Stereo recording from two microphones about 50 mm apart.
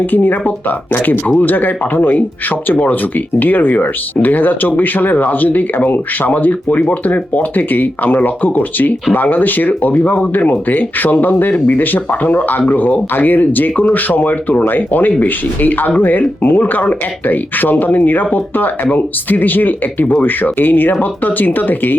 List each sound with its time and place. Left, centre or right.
0.0 s speech: left